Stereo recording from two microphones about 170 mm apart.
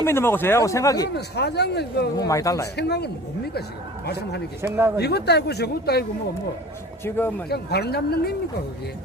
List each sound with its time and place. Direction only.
0.0 s speech: 15° left (ahead or behind)
1.1 s speech: 80° left
2.1 s a man's voice: 20° left (ahead or behind)
2.7 s speech: 75° left (ahead or behind)
7.0 s speech: 10° left (ahead or behind)
7.5 s speech: 70° left (ahead or behind)